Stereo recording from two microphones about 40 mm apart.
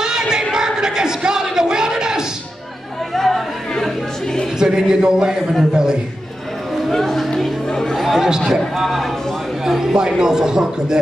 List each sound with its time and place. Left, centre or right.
0.0 s a sound: centre
3.2 s chatter: centre
4.6 s a man's voice: centre
6.9 s chatter: centre
8.5 s a man's voice: centre
9.9 s speech: centre